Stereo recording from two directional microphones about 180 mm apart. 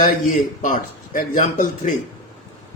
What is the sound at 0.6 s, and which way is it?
Speech, 50° left (ahead or behind).